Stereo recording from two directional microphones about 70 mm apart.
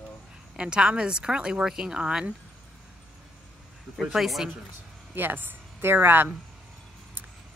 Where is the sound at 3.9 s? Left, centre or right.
Centre.